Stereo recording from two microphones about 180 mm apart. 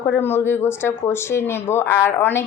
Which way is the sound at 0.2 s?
10° left (ahead or behind).